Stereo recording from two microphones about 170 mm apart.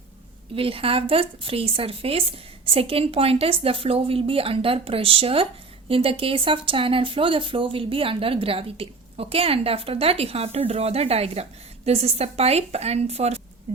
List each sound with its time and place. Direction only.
0.5 s speech: 35° right (ahead or behind)